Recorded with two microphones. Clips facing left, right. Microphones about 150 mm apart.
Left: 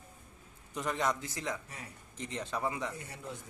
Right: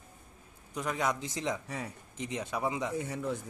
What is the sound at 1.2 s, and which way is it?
Speech, 20° right (ahead or behind).